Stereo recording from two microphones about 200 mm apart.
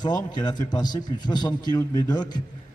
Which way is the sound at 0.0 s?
20° left (ahead or behind).